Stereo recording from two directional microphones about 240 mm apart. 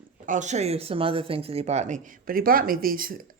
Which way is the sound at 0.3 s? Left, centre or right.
Right.